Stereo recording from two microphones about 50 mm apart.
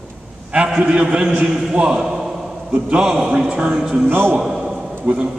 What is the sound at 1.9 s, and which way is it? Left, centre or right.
A man's voice, centre.